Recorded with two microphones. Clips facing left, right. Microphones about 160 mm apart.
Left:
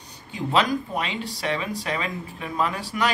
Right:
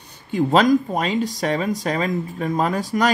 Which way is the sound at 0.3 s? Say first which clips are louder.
Right 7 dB; 40° right (ahead or behind).